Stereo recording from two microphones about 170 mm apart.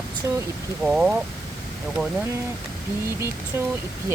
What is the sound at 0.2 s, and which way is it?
Speech, 15° right (ahead or behind).